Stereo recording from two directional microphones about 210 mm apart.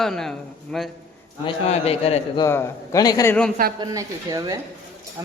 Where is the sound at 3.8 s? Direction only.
15° right (ahead or behind).